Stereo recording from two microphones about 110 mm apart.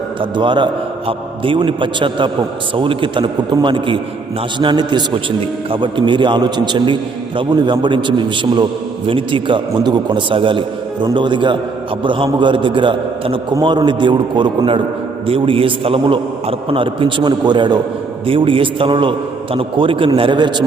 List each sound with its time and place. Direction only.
0.2 s a man's voice: 45° right (ahead or behind)
18.3 s a man's voice: 55° right (ahead or behind)